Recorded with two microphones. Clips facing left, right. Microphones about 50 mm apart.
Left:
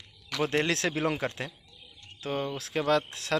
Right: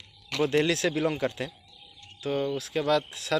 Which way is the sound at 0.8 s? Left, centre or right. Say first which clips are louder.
Right 3 dB; left.